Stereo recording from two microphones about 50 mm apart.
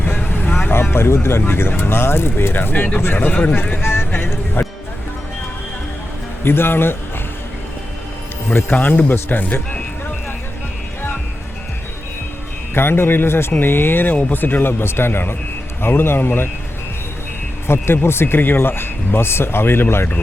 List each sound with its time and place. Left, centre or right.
0.4 s vehicle: left
0.7 s vehicle: left
1.5 s speech: left
2.7 s speech: left
3.8 s music: left
6.4 s speech: left
8.7 s speech: left
12.7 s speech: left
17.7 s speech: left